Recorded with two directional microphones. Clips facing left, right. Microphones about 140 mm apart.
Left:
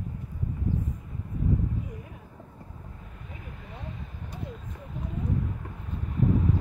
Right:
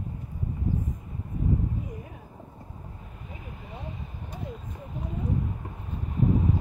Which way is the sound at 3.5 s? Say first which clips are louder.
Right 2 dB; 15° right (ahead or behind).